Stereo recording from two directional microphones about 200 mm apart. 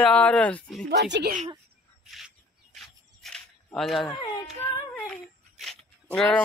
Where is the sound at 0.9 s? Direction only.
55° right (ahead or behind).